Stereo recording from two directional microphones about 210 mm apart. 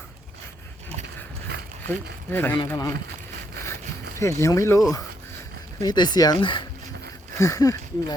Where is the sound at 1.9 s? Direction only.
10° left (ahead or behind).